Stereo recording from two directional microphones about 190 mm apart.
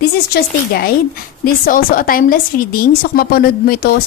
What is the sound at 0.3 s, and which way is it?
A woman's voice, 55° left (ahead or behind).